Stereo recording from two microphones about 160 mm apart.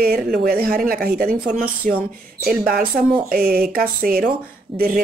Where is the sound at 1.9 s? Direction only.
55° right (ahead or behind).